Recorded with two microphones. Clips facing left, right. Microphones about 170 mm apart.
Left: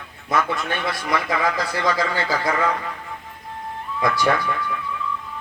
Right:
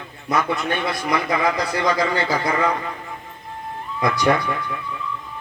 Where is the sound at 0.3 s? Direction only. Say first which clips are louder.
Right 1 dB; 25° right (ahead or behind).